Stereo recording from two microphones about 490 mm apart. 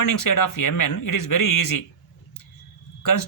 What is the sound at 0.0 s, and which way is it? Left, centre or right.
A man's voice, left.